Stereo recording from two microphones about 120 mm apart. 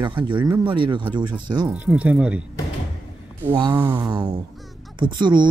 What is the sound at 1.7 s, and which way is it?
Speech, 10° right (ahead or behind).